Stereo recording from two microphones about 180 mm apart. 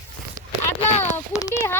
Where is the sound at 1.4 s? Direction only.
15° left (ahead or behind).